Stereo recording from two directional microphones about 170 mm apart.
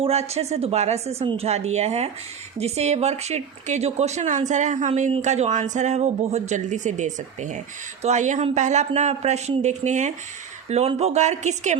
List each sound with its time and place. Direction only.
0.0 s a woman's voice: 40° right (ahead or behind)